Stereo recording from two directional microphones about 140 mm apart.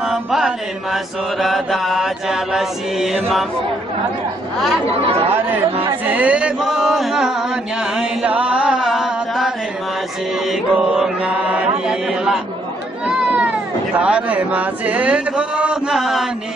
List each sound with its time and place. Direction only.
0.0 s chant: centre (ahead or behind)
0.9 s mantra: centre (ahead or behind)
6.0 s chant: 10° right (ahead or behind)
10.5 s mantra: 5° right (ahead or behind)
13.0 s speech: 5° right (ahead or behind)